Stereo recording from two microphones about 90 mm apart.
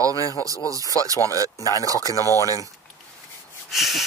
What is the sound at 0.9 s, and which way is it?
Speech, 40° right (ahead or behind).